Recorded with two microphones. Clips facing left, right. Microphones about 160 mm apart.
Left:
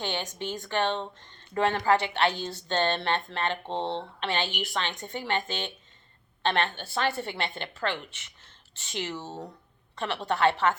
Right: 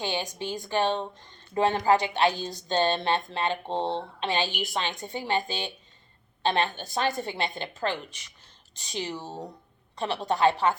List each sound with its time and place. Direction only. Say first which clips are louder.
0.0 s a woman's voice: right 2 dB; 10° right (ahead or behind)